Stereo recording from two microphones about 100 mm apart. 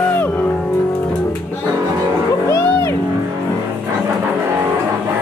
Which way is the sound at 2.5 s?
25° left (ahead or behind).